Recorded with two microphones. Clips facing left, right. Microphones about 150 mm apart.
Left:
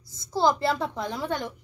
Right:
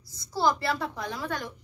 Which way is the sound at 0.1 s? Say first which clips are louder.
Left 3 dB; 20° left (ahead or behind).